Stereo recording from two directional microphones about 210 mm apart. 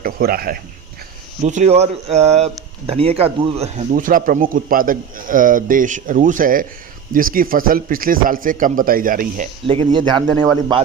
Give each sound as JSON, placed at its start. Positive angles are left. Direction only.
{"t": 0.0, "sound": "speech", "side_deg": -45}
{"t": 1.4, "sound": "speech", "side_deg": -30}
{"t": 9.6, "sound": "a man's voice", "side_deg": -25}